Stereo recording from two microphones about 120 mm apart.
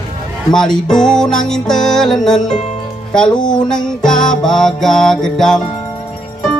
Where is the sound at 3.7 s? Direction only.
5° left (ahead or behind).